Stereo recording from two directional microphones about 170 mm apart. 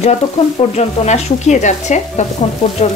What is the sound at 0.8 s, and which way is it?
Speech, 40° left (ahead or behind).